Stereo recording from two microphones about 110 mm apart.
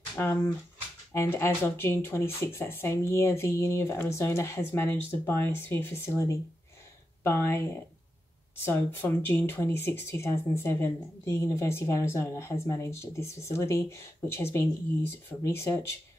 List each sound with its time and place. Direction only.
0.2 s speech: 20° left (ahead or behind)